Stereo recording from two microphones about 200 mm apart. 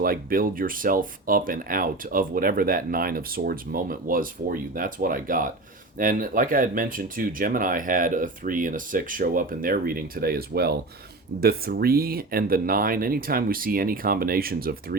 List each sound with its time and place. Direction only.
0.0 s speech: 45° right (ahead or behind)